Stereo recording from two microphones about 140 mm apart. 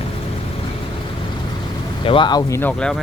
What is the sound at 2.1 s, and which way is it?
Speech, 35° left (ahead or behind).